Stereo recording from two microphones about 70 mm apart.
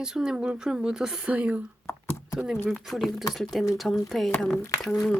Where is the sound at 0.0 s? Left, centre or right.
Centre.